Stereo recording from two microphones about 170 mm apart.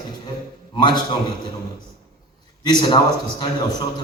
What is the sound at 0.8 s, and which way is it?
Speech, 25° left (ahead or behind).